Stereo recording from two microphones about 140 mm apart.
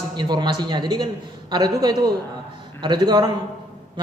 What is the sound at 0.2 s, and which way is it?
A man's voice, 30° right (ahead or behind).